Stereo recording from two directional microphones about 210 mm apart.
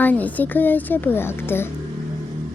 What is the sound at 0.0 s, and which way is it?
Speech, 5° left (ahead or behind).